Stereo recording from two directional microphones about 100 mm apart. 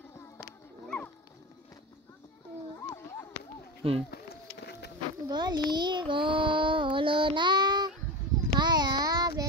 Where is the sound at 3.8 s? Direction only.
70° right (ahead or behind).